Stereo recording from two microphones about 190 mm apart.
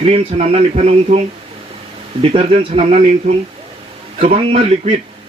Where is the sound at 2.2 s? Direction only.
35° right (ahead or behind).